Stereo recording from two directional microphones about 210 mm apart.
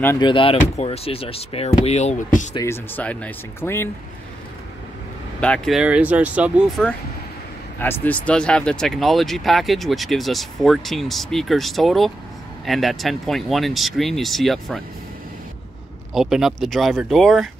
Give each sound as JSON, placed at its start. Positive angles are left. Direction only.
{"t": 0.2, "sound": "speech", "side_deg": 25}
{"t": 2.5, "sound": "speech", "side_deg": 10}
{"t": 5.4, "sound": "speech", "side_deg": 0}
{"t": 16.1, "sound": "speech", "side_deg": 0}